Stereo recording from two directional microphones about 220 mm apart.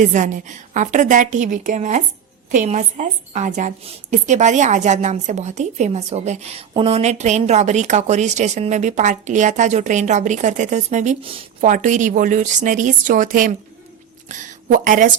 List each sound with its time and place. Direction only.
0.0 s a woman's voice: 35° right (ahead or behind)